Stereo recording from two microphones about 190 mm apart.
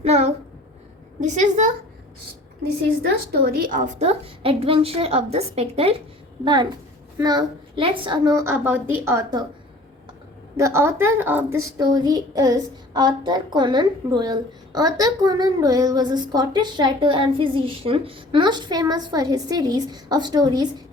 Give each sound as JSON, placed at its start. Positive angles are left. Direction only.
{"t": 0.0, "sound": "a child's voice", "side_deg": -35}
{"t": 3.0, "sound": "a woman's voice", "side_deg": -50}
{"t": 10.6, "sound": "a woman's voice", "side_deg": -15}
{"t": 11.8, "sound": "a woman's voice", "side_deg": -20}